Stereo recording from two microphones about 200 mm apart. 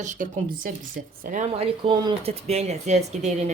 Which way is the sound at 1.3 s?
35° right (ahead or behind).